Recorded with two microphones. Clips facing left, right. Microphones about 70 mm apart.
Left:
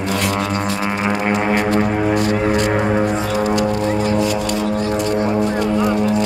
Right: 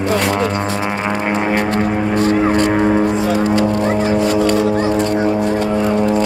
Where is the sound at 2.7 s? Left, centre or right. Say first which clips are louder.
Right 3 dB; centre.